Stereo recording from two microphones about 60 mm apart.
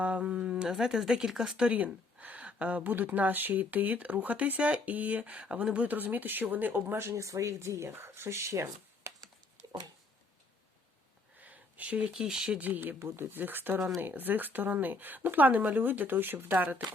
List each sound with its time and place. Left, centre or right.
0.0 s speech: right
7.2 s speech: right
11.4 s a sound: right
12.1 s speech: centre
12.5 s speech: right
13.0 s speech: right